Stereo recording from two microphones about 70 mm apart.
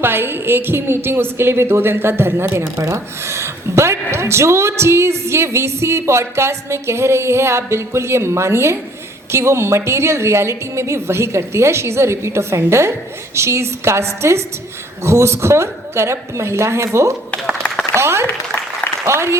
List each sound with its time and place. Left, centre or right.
0.0 s a woman's voice: right